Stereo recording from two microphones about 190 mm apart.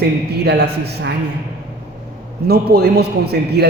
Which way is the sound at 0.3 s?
60° right (ahead or behind).